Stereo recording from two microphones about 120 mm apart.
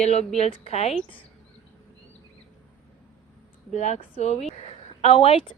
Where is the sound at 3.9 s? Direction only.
60° left (ahead or behind).